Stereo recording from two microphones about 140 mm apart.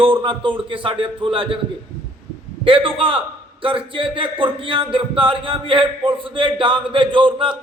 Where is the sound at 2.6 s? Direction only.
40° right (ahead or behind).